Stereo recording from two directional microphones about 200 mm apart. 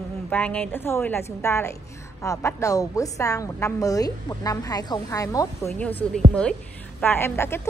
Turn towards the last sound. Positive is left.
turn(degrees=10)  # may be behind; listen again after turning